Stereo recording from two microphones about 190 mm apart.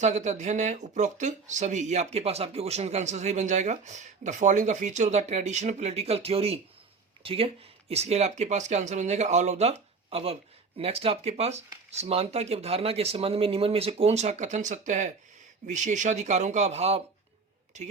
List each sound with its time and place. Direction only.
0.0 s speech: 40° right (ahead or behind)